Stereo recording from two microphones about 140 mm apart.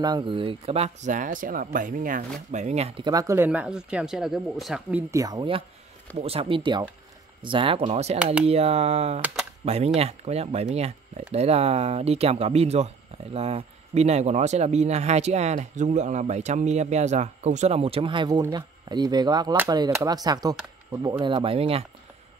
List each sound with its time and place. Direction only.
0.0 s speech: 35° right (ahead or behind); by 2.2 s 70° right (ahead or behind)
2.5 s speech: 55° right (ahead or behind)
3.0 s speech: 25° right (ahead or behind); by 5.0 s 5° right (ahead or behind)
5.1 s speech: 25° right (ahead or behind)
6.1 s speech: 45° right (ahead or behind)